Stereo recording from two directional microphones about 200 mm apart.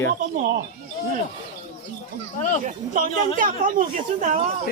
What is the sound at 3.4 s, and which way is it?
Speech, 45° right (ahead or behind).